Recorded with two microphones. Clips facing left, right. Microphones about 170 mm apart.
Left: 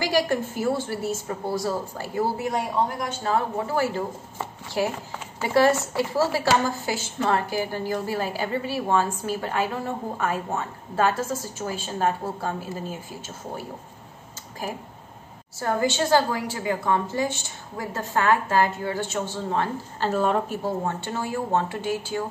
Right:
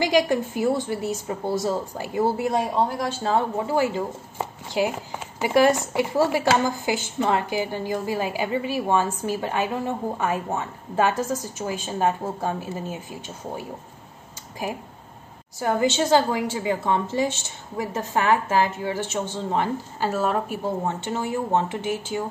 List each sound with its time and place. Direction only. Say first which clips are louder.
0.0 s speech: right 3 dB; 20° right (ahead or behind)
15.6 s a woman's voice: right 2 dB; 20° right (ahead or behind); by 20.5 s centre (ahead or behind)
20.6 s speech: right 1 dB; 15° right (ahead or behind)